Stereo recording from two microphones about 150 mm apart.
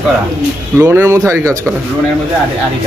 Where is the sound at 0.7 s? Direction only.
15° right (ahead or behind).